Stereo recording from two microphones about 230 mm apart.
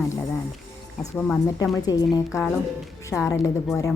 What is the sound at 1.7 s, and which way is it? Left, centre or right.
A woman's voice, centre.